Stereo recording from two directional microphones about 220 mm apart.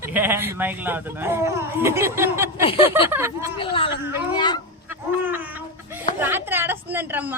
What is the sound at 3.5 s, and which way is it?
Speech, 25° left (ahead or behind).